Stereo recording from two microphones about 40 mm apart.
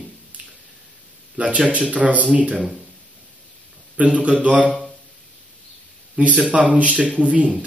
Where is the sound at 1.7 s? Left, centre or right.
Right.